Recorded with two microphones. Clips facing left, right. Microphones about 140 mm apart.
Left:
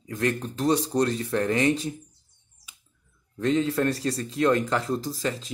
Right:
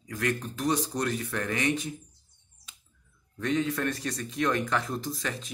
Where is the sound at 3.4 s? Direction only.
30° left (ahead or behind).